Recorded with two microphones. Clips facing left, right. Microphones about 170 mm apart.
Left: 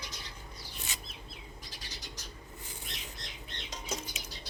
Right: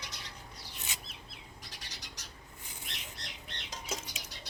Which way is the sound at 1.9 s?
70° right (ahead or behind).